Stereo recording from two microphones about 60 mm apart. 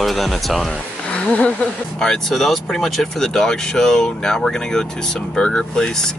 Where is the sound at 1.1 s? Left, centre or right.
Centre.